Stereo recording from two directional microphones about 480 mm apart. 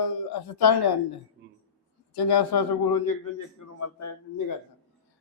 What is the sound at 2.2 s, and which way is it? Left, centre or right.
A man's voice, left.